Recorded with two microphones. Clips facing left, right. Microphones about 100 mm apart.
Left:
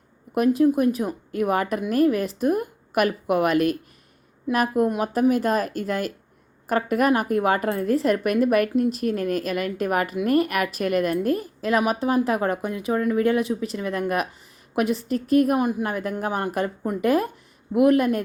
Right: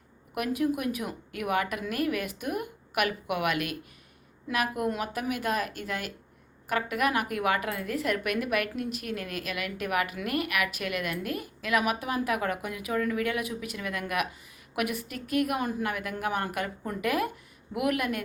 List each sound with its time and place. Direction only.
0.3 s a woman's voice: 30° left (ahead or behind)